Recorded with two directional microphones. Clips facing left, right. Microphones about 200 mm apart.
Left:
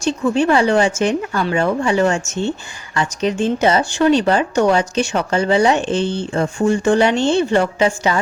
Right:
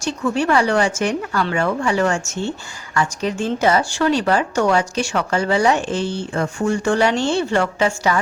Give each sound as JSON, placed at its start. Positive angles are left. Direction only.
{"t": 0.0, "sound": "speech", "side_deg": 25}